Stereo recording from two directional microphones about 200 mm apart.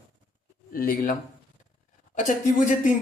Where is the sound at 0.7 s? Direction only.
45° left (ahead or behind).